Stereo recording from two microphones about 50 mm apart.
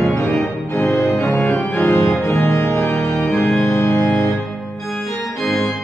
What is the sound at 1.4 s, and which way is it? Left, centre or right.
Organ, left.